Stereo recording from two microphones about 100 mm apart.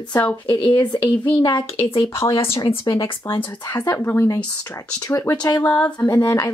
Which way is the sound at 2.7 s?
65° left (ahead or behind).